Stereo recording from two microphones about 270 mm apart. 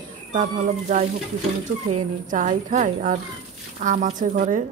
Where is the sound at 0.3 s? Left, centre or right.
Right.